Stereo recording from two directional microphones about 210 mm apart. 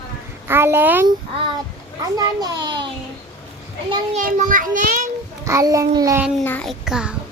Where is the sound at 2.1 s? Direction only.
20° right (ahead or behind).